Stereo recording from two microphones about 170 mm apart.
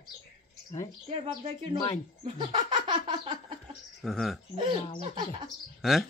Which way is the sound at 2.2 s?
30° right (ahead or behind).